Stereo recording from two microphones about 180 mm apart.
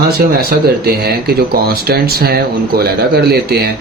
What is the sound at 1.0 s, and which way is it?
Speech, 60° right (ahead or behind).